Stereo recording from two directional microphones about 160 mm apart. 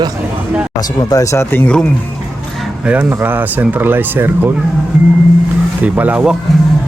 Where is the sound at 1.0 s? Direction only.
25° left (ahead or behind).